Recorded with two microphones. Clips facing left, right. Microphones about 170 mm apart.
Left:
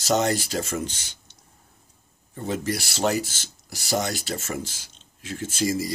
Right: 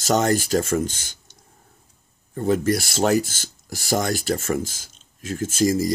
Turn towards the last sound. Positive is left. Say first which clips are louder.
# right 5 dB
turn(degrees=-45)  # may be behind; listen again after turning